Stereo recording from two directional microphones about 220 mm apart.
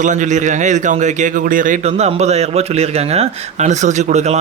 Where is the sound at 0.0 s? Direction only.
35° right (ahead or behind).